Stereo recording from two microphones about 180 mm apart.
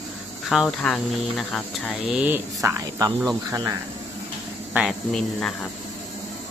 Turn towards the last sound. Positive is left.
turn(degrees=5)  # may be behind; listen again after turning